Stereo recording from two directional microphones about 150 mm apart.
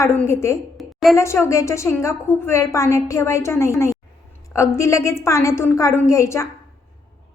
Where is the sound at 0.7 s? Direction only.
Centre (ahead or behind).